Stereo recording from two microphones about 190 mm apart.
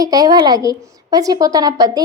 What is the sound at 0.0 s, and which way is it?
A woman's voice, 20° right (ahead or behind).